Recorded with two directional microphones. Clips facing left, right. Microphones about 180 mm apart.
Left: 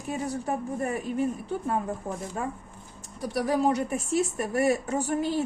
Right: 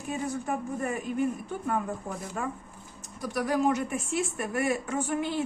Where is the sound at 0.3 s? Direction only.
35° left (ahead or behind).